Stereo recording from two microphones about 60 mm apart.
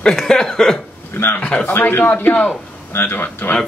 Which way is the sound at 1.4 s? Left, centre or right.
Left.